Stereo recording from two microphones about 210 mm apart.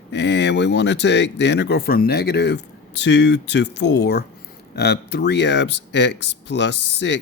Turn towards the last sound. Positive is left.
turn(degrees=55)  # may be behind; listen again after turning